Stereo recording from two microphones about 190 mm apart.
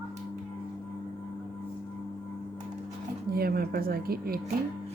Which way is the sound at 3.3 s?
55° right (ahead or behind).